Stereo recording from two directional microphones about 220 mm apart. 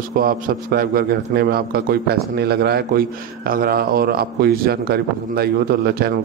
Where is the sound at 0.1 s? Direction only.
40° right (ahead or behind).